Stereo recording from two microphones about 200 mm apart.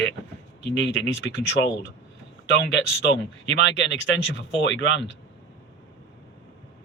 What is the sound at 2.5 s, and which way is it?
Speech, 65° left (ahead or behind).